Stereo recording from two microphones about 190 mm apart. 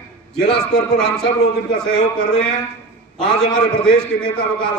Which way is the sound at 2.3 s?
5° left (ahead or behind).